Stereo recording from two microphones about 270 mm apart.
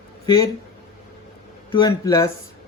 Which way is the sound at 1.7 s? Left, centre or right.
Centre.